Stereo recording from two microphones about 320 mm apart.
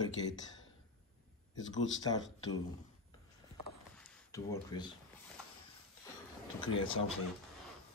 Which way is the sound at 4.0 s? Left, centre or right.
Centre.